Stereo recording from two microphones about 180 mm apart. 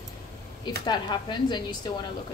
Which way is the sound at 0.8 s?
25° left (ahead or behind).